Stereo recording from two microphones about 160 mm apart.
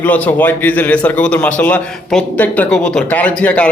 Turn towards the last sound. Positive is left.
turn(degrees=10)  # may be behind; listen again after turning